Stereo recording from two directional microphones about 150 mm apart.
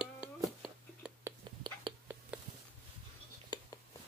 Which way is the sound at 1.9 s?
35° right (ahead or behind).